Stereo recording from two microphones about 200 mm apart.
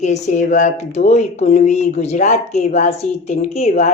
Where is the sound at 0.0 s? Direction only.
35° left (ahead or behind).